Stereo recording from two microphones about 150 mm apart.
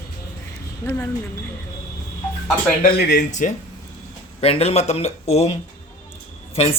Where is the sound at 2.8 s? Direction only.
90° left.